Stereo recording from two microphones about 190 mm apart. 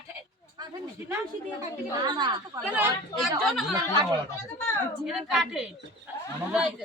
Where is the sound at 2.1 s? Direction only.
25° right (ahead or behind).